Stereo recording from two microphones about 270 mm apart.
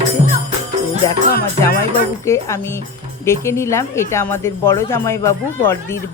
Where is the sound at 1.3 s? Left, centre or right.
Left.